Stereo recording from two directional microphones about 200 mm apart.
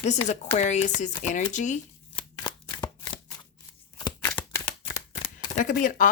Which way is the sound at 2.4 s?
20° left (ahead or behind).